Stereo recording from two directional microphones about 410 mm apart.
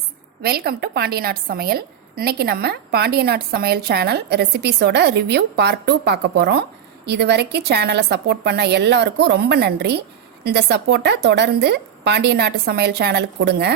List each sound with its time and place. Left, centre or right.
0.4 s a woman's voice: right